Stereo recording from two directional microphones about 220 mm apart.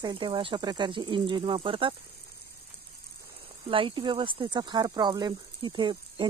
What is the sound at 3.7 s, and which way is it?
Speech, 25° right (ahead or behind).